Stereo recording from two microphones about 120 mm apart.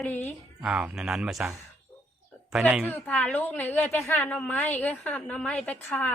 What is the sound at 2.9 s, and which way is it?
A woman's voice, 10° left (ahead or behind).